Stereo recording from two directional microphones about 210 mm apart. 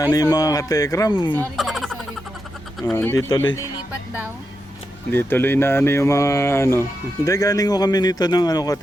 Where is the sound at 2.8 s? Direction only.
5° left (ahead or behind).